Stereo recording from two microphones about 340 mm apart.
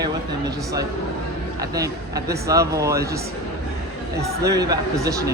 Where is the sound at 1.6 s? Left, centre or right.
Centre.